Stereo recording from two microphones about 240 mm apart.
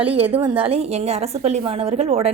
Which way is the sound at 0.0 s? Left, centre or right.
Right.